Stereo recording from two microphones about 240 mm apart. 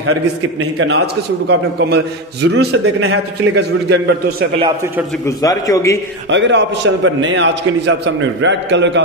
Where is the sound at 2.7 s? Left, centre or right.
Right.